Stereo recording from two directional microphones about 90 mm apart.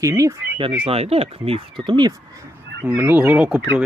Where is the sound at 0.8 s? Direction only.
90° right; by 2.1 s 60° right (ahead or behind).